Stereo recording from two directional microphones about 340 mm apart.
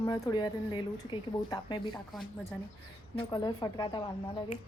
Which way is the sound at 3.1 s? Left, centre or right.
Centre.